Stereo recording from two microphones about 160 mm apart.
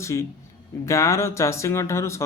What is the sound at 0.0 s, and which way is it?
Speech, 20° left (ahead or behind).